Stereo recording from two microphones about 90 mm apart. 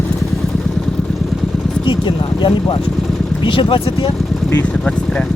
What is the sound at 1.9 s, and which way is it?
Speech, 65° left (ahead or behind).